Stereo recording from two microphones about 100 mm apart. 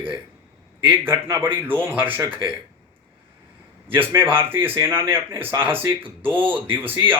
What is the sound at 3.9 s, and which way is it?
Speech, 20° right (ahead or behind).